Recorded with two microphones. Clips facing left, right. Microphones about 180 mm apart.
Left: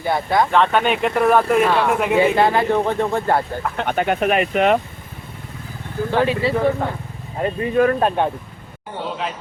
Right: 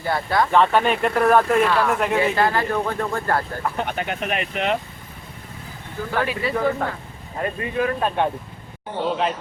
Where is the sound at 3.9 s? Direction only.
55° left (ahead or behind).